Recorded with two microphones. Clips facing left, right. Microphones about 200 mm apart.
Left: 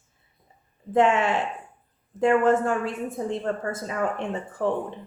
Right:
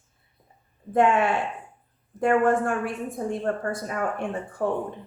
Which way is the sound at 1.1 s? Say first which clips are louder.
Right 1 dB; 25° left (ahead or behind).